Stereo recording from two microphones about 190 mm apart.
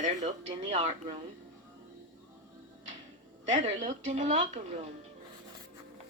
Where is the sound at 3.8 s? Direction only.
40° right (ahead or behind).